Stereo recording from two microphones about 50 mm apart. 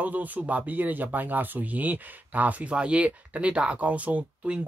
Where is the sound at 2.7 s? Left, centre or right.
Right.